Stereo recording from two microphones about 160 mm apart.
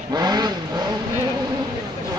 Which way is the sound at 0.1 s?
25° right (ahead or behind).